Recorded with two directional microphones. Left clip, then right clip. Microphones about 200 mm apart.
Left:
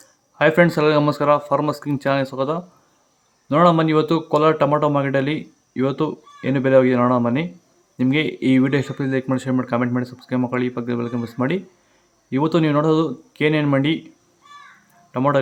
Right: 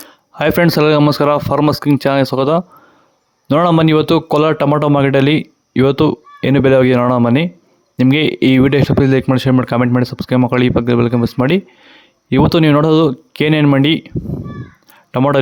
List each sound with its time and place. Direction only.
0.0 s speech: 50° right (ahead or behind)
15.1 s speech: 45° right (ahead or behind)